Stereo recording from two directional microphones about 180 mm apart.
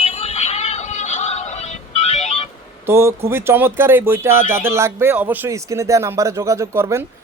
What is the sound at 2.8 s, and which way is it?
A man's voice, 15° right (ahead or behind).